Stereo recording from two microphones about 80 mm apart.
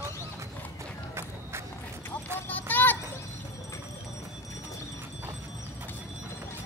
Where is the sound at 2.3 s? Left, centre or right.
Left.